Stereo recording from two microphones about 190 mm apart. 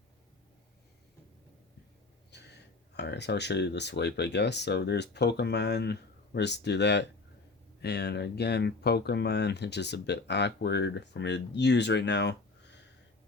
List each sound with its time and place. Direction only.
2.3 s speech: 60° left (ahead or behind)